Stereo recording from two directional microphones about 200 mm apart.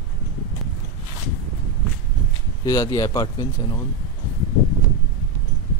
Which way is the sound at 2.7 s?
20° left (ahead or behind).